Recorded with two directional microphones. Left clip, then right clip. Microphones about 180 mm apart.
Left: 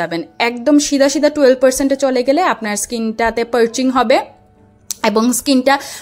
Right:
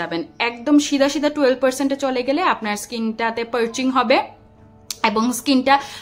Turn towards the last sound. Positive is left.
turn(degrees=30)  # may be behind; listen again after turning